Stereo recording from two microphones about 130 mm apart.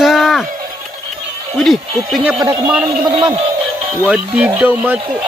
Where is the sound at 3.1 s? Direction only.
45° right (ahead or behind).